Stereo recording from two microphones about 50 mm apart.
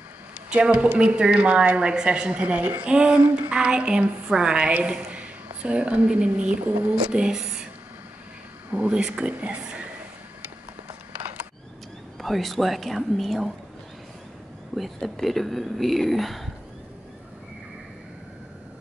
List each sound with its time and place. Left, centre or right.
0.5 s a woman's voice: right
7.1 s a sound: centre
8.8 s a woman's voice: centre
12.2 s speech: centre
14.8 s speech: centre